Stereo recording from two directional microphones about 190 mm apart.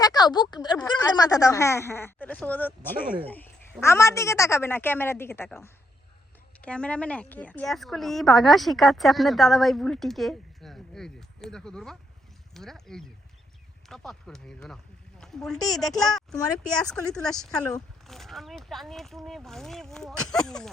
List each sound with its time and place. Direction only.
0.0 s a woman's voice: 20° left (ahead or behind); by 20.7 s 5° left (ahead or behind)